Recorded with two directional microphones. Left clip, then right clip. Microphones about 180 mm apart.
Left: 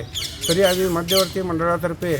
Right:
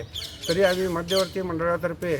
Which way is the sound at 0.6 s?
15° right (ahead or behind).